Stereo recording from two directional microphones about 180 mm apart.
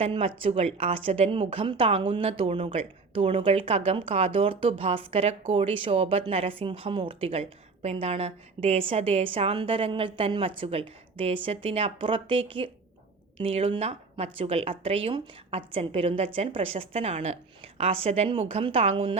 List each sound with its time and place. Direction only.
0.0 s a woman's voice: 30° right (ahead or behind)